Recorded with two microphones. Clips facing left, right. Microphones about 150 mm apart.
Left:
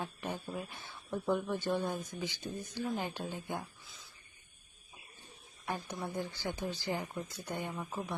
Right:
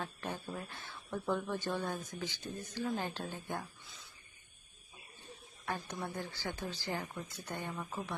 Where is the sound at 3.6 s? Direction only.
Centre (ahead or behind).